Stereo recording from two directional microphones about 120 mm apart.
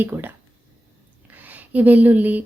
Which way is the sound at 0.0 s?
15° right (ahead or behind).